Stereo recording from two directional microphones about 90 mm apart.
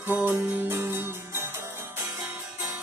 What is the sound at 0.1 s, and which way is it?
Music, 20° right (ahead or behind).